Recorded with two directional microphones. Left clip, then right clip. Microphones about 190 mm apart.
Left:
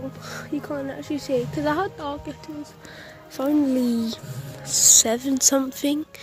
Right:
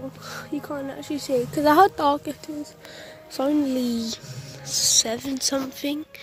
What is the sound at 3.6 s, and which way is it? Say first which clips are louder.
Speech: left 3 dB; 5° left (ahead or behind).